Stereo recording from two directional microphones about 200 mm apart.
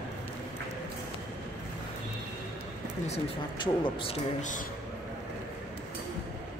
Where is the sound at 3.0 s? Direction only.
30° left (ahead or behind).